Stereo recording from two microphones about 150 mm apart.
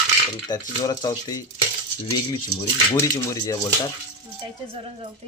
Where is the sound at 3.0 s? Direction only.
25° left (ahead or behind).